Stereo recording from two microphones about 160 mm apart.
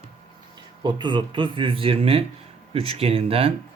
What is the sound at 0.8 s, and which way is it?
Speech, 30° right (ahead or behind).